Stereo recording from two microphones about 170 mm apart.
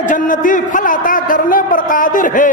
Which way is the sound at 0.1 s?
50° left (ahead or behind).